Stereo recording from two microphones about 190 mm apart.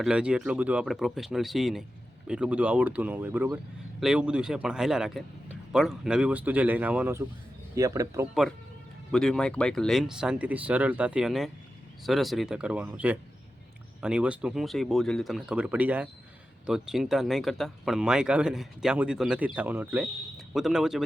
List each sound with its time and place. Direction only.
0.0 s speech: 5° right (ahead or behind)
9.1 s speech: 5° left (ahead or behind)